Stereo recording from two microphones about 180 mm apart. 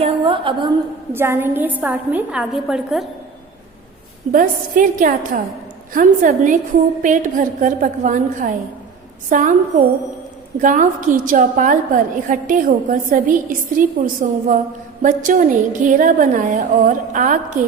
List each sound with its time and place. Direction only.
0.0 s a woman's voice: 30° right (ahead or behind)
1.1 s a woman's voice: 15° right (ahead or behind)
4.3 s a woman's voice: 50° right (ahead or behind)